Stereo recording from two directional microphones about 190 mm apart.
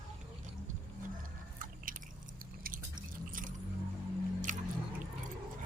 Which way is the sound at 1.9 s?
45° right (ahead or behind).